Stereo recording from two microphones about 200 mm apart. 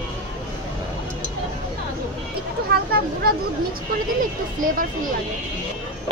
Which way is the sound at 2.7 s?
50° right (ahead or behind).